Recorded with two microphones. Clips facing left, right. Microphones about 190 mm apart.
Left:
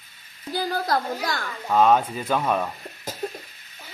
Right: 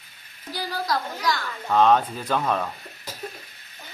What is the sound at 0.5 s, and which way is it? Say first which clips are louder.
Speech: left 3 dB; 50° left (ahead or behind).